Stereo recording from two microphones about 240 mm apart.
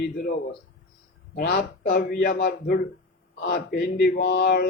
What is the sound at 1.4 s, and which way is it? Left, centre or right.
Speech, left.